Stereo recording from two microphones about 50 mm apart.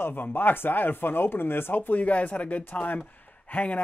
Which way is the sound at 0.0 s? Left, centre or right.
Left.